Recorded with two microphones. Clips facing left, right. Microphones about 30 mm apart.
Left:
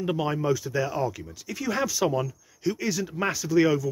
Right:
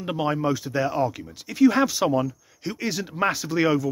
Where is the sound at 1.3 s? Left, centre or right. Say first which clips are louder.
Right 10 dB; right.